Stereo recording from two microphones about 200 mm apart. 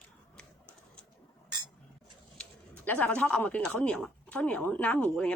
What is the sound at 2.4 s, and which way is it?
Speech, 5° left (ahead or behind).